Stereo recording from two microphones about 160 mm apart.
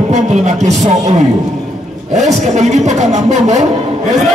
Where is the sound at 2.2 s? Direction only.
45° right (ahead or behind).